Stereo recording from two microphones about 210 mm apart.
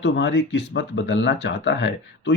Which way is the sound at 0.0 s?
60° left (ahead or behind).